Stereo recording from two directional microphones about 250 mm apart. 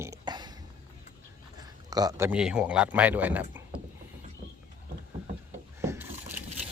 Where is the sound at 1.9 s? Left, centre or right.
Centre.